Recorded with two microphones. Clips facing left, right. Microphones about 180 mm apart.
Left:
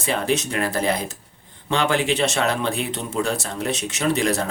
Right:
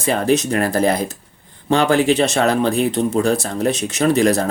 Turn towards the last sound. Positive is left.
turn(degrees=-40)  # may be behind; listen again after turning